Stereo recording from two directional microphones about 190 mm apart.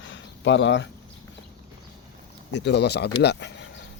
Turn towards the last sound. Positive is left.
turn(degrees=65)  # may be behind; listen again after turning